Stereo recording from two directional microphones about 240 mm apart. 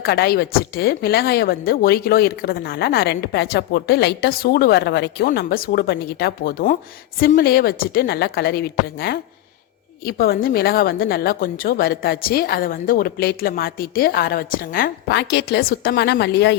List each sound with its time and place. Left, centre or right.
0.0 s a woman's voice: left